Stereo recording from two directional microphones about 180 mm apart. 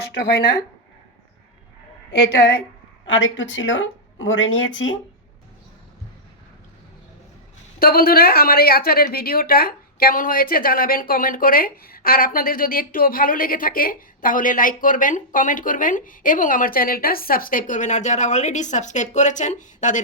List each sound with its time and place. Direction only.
2.1 s a woman's voice: 70° left (ahead or behind)
3.1 s speech: 90° left
7.8 s a woman's voice: 55° left (ahead or behind)